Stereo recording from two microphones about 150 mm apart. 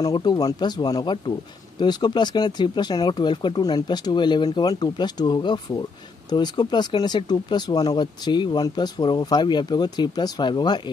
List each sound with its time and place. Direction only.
0.0 s speech: 30° left (ahead or behind)